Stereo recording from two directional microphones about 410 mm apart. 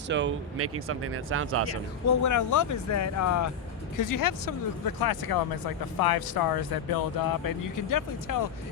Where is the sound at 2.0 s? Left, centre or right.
Left.